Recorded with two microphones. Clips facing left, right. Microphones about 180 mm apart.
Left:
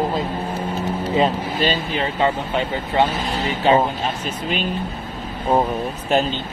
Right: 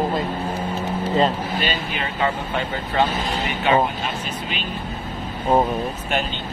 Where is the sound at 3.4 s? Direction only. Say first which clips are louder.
Left 3 dB; 30° left (ahead or behind).